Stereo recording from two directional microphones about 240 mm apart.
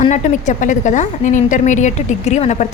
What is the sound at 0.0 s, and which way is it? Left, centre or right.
A woman's voice, left.